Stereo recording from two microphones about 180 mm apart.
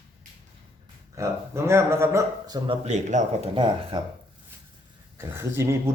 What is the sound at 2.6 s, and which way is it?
A man's voice, 35° right (ahead or behind).